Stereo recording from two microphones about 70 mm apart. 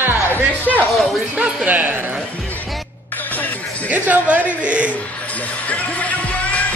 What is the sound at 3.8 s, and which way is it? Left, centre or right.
Speech, right.